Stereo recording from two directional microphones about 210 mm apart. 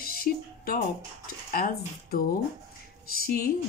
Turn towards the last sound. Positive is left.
turn(degrees=45)  # may be behind; listen again after turning